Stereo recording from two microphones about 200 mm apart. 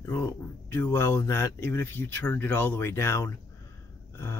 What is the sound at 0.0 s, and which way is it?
Speech, 15° left (ahead or behind).